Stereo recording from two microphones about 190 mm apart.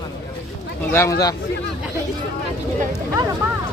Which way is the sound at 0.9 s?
15° left (ahead or behind).